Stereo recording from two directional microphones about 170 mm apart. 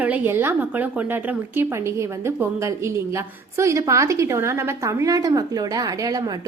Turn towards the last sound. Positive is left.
turn(degrees=-20)  # may be behind; listen again after turning